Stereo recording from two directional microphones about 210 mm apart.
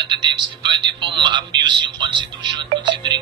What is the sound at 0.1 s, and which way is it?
Speech, 20° right (ahead or behind).